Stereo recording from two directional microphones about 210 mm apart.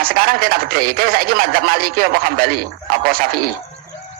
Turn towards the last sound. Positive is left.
turn(degrees=-45)  # may be behind; listen again after turning